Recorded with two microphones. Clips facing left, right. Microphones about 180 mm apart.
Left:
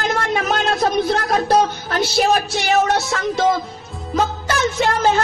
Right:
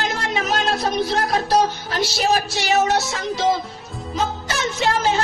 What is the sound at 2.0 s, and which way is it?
Music, 55° left (ahead or behind).